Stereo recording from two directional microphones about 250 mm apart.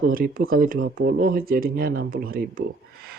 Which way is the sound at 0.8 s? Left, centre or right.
Right.